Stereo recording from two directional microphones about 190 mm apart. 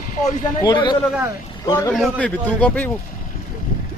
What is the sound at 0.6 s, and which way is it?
Speech, 25° left (ahead or behind).